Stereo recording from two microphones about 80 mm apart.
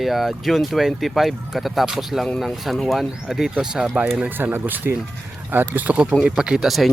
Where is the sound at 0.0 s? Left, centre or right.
Centre.